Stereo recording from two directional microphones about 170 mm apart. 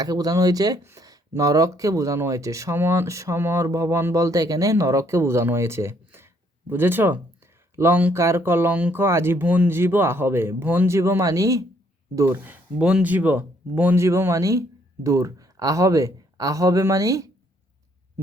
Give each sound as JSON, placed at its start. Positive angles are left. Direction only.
{"t": 0.0, "sound": "speech", "side_deg": -20}